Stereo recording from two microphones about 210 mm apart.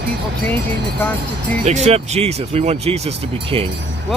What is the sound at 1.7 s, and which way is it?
Speech, 30° right (ahead or behind).